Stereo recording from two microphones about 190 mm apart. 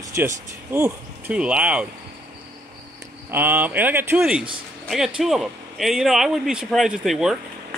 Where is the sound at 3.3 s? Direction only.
10° right (ahead or behind).